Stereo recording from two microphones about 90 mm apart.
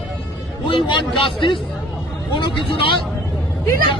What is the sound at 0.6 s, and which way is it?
A man's voice, 65° left (ahead or behind).